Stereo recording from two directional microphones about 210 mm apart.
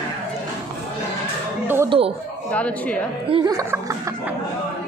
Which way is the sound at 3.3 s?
15° right (ahead or behind).